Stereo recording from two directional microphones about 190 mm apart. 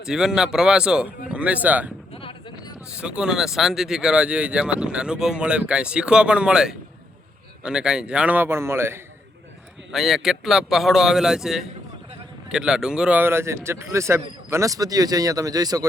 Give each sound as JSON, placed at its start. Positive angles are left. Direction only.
{"t": 0.0, "sound": "speech", "side_deg": -5}
{"t": 2.1, "sound": "a sound", "side_deg": 30}
{"t": 3.0, "sound": "a man's voice", "side_deg": -5}
{"t": 9.9, "sound": "a man's voice", "side_deg": 0}